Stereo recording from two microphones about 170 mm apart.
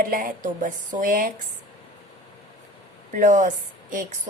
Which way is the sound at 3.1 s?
50° right (ahead or behind).